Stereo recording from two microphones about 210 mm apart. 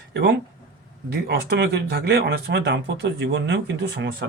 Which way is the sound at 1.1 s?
50° right (ahead or behind).